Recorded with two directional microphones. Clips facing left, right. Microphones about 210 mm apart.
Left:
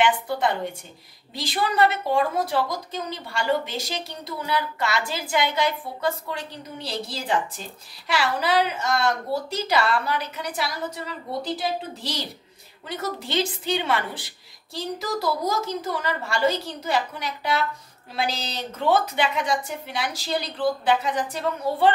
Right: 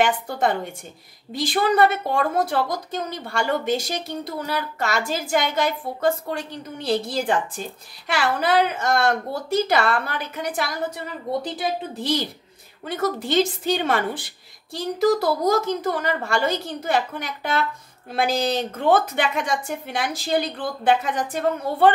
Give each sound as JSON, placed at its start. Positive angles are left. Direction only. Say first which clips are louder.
{"t": 0.0, "sound": "a woman's voice", "louder": "right 1 dB", "side_deg": -45}